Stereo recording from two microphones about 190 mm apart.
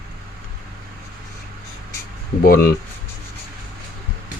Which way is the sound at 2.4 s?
45° left (ahead or behind).